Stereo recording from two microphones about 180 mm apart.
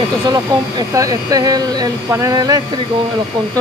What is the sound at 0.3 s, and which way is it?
Speech, 20° right (ahead or behind).